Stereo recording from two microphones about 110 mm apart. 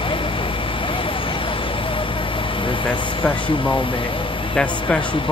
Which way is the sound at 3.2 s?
50° left (ahead or behind).